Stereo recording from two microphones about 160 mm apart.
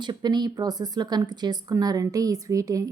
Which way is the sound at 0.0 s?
25° right (ahead or behind).